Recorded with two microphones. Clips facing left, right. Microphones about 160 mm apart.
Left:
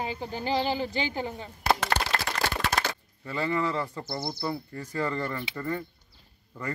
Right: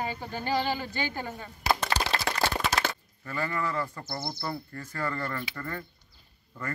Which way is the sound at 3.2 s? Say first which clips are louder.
Left 3 dB; 25° left (ahead or behind).